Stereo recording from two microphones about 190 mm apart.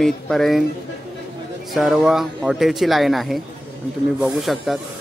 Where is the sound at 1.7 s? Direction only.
Centre (ahead or behind).